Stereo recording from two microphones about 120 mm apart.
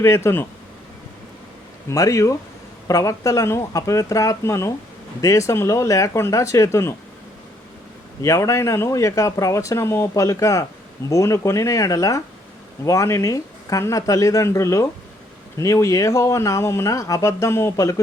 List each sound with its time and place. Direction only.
0.0 s speech: 20° left (ahead or behind)
1.9 s speech: 25° left (ahead or behind)
8.2 s speech: 25° left (ahead or behind)